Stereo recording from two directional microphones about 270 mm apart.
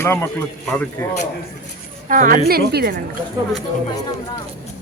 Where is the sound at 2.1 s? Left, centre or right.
Right.